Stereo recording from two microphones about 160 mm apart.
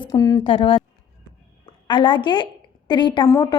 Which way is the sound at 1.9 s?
30° left (ahead or behind).